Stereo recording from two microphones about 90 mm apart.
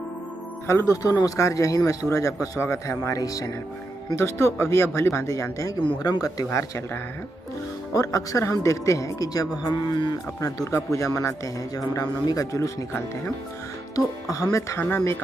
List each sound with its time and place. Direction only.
0.7 s speech: 35° left (ahead or behind)
4.1 s speech: 30° left (ahead or behind)
7.9 s speech: 40° left (ahead or behind)
10.4 s speech: 35° left (ahead or behind)
14.3 s speech: 35° left (ahead or behind)